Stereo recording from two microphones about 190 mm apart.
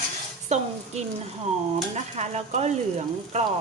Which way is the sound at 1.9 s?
35° right (ahead or behind).